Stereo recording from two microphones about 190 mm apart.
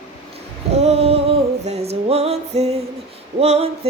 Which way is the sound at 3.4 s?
35° right (ahead or behind).